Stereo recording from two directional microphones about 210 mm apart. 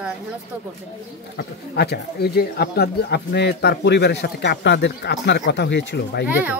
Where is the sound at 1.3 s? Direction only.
50° left (ahead or behind).